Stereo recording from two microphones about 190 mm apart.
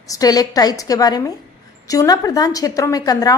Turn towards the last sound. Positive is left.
turn(degrees=20)  # may be behind; listen again after turning